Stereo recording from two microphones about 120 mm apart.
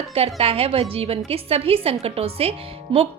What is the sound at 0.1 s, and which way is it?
A woman's voice, 55° right (ahead or behind).